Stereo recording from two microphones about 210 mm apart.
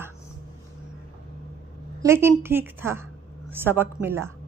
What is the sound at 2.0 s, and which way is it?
A woman's voice, 10° right (ahead or behind).